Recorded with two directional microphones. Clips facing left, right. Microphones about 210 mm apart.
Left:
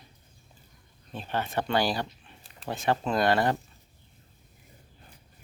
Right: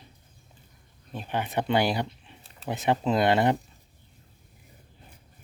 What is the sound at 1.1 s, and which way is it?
Speech, 15° right (ahead or behind).